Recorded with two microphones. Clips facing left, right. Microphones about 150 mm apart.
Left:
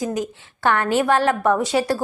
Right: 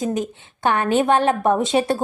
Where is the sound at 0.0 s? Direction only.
20° right (ahead or behind).